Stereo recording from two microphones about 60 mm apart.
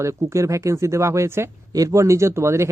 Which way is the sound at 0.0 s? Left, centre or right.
Right.